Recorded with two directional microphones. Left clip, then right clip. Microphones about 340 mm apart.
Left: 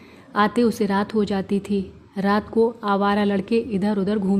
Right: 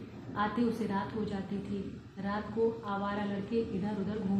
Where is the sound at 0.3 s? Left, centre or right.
Left.